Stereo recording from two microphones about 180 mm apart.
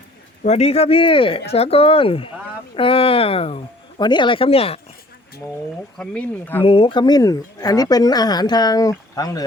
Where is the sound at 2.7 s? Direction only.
30° left (ahead or behind).